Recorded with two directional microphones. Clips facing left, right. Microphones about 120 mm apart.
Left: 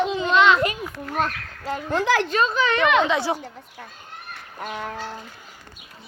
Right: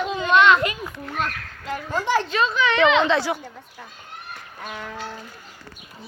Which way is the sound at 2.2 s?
40° left (ahead or behind).